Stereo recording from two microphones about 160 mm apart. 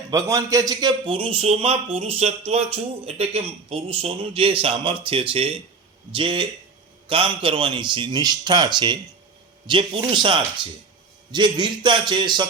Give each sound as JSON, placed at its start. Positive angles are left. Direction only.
{"t": 0.1, "sound": "a man's voice", "side_deg": -20}